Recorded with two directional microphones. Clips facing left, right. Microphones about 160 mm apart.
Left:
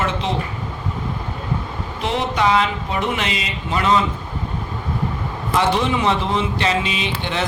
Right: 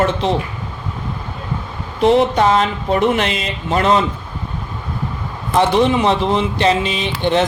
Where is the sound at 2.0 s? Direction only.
40° right (ahead or behind).